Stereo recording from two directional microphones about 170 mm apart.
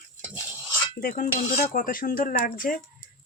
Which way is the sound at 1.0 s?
55° left (ahead or behind).